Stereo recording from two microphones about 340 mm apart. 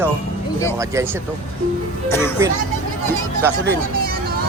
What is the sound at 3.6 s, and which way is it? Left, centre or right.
Music, right.